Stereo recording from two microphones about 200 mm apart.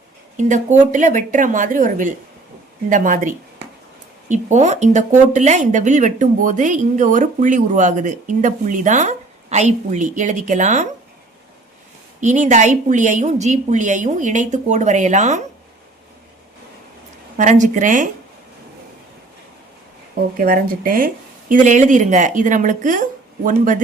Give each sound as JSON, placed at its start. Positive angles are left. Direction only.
{"t": 0.3, "sound": "speech", "side_deg": -40}
{"t": 12.2, "sound": "speech", "side_deg": -40}
{"t": 17.3, "sound": "speech", "side_deg": -40}
{"t": 20.3, "sound": "speech", "side_deg": -45}